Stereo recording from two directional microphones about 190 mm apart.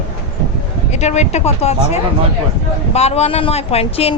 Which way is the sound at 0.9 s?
35° left (ahead or behind).